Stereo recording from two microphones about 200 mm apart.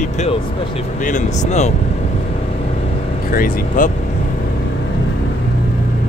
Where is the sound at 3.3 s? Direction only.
45° left (ahead or behind).